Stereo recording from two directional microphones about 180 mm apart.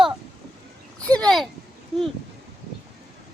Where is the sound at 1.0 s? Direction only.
5° left (ahead or behind).